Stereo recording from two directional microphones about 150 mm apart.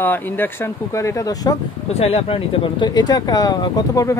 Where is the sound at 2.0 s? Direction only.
40° left (ahead or behind).